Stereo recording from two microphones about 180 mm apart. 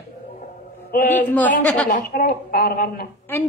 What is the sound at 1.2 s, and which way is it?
Speech, 10° left (ahead or behind).